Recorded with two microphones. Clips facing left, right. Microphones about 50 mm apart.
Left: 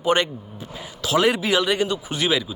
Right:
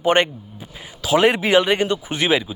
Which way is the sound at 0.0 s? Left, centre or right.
Right.